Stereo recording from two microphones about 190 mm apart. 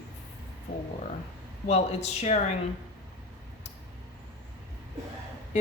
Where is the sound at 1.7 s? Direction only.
35° left (ahead or behind).